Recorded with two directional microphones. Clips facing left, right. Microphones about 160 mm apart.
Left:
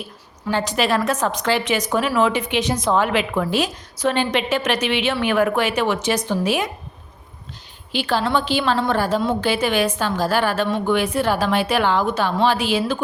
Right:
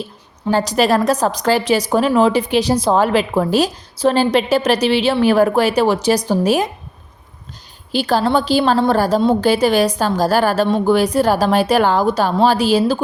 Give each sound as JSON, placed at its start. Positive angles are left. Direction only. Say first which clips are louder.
{"t": 0.4, "sound": "a woman's voice", "louder": "right 5 dB", "side_deg": -40}
{"t": 7.9, "sound": "a woman's voice", "louder": "right 5 dB", "side_deg": -40}